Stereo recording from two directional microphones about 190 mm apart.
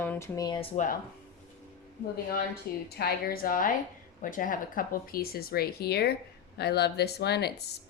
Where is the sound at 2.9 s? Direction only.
55° left (ahead or behind).